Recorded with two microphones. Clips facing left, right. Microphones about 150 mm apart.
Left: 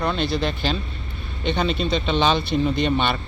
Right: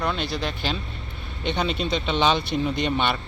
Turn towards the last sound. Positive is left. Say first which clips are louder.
# left 3 dB
turn(degrees=-10)  # may be behind; listen again after turning